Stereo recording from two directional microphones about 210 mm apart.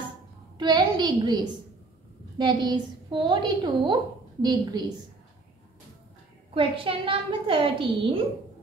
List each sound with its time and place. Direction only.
0.6 s a woman's voice: 20° right (ahead or behind)
6.5 s a woman's voice: 25° right (ahead or behind)